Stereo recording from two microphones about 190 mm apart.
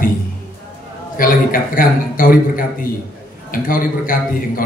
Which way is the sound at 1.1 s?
45° left (ahead or behind).